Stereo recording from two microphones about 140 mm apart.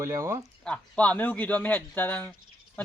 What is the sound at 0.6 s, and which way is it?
A man's voice, 10° left (ahead or behind).